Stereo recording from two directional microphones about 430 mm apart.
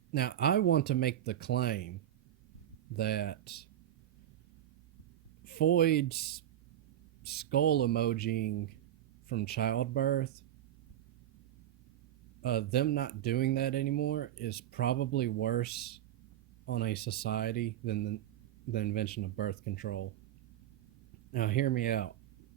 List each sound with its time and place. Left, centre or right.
0.1 s speech: left
2.9 s speech: left
5.5 s speech: left
12.4 s speech: left
21.3 s speech: centre